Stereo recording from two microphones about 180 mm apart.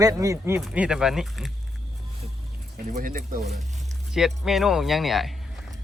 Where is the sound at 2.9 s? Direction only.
45° right (ahead or behind).